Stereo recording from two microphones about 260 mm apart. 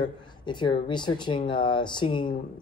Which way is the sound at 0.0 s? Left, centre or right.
Centre.